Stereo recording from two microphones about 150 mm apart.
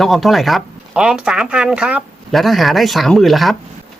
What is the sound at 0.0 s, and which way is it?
Speech, centre (ahead or behind).